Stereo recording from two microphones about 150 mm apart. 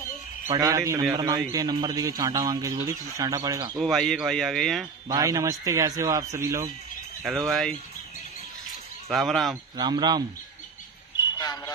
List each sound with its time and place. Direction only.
0.5 s speech: 25° right (ahead or behind)
3.7 s speech: centre (ahead or behind)
5.0 s speech: 25° right (ahead or behind)
7.2 s speech: centre (ahead or behind)
9.1 s speech: centre (ahead or behind)
9.8 s speech: 30° right (ahead or behind)
11.3 s a sound: 25° left (ahead or behind)